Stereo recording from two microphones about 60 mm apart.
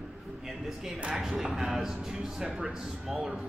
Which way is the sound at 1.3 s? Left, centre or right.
Centre.